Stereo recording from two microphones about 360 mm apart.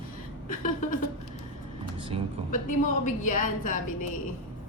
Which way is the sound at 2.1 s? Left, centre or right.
Centre.